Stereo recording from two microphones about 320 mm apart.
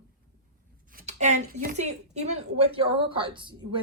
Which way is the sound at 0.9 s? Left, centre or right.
Right.